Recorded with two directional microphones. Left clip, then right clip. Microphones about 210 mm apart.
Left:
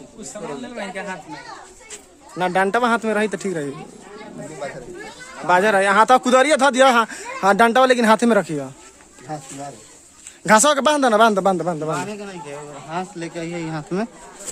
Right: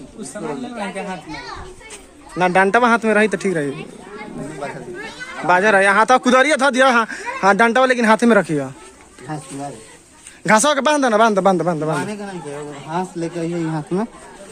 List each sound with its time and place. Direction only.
2.4 s speech: 10° left (ahead or behind)
5.5 s speech: 10° left (ahead or behind)
10.4 s speech: 15° left (ahead or behind)
12.9 s speech: centre (ahead or behind)